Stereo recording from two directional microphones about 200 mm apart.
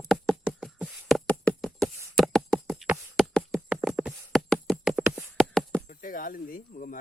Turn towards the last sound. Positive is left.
turn(degrees=40)  # may be behind; listen again after turning